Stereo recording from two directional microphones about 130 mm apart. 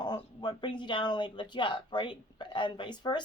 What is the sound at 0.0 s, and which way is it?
Speech, 35° left (ahead or behind).